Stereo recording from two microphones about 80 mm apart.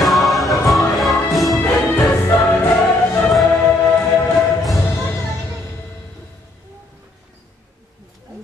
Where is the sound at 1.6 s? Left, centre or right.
Left.